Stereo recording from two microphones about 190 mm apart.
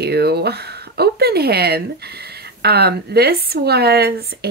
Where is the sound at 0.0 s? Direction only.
60° right (ahead or behind).